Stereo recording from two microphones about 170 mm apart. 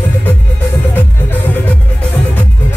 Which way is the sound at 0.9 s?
10° left (ahead or behind).